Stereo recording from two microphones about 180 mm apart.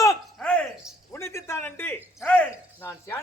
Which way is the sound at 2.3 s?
10° left (ahead or behind).